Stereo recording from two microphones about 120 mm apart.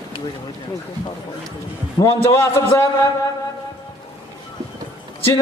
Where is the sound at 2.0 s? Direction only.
25° left (ahead or behind).